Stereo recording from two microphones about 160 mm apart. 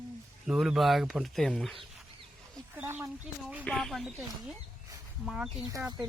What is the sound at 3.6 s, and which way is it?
Speech, 5° left (ahead or behind).